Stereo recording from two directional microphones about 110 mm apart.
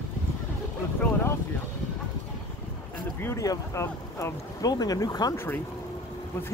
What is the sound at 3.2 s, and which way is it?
A man's voice, 30° left (ahead or behind).